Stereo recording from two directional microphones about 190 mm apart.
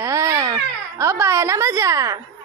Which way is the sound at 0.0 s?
15° right (ahead or behind).